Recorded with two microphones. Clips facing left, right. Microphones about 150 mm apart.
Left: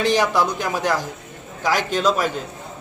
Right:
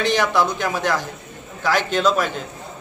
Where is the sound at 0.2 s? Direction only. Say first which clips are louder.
Even; 10° left (ahead or behind).